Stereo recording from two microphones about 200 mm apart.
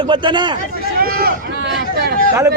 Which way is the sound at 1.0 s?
45° right (ahead or behind).